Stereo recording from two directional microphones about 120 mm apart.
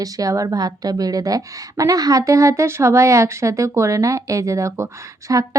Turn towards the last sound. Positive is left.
turn(degrees=-25)  # may be behind; listen again after turning